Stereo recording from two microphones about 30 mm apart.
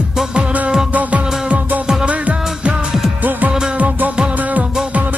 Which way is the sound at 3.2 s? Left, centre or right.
Right.